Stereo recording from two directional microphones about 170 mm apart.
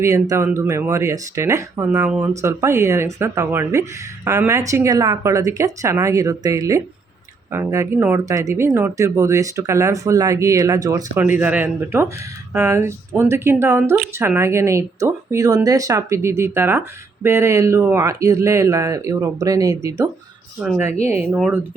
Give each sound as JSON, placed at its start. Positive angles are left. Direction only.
{"t": 0.0, "sound": "speech", "side_deg": -20}
{"t": 11.2, "sound": "speech", "side_deg": -10}
{"t": 20.6, "sound": "speech", "side_deg": -5}